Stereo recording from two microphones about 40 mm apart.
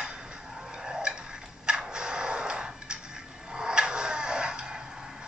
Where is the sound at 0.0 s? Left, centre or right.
Right.